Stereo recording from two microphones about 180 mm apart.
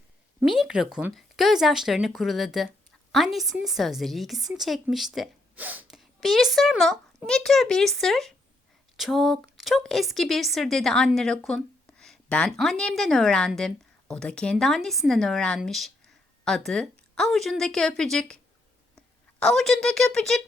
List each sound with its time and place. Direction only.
0.4 s a woman's voice: 5° right (ahead or behind)